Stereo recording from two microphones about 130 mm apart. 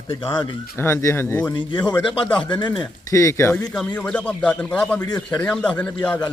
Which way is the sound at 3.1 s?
25° left (ahead or behind).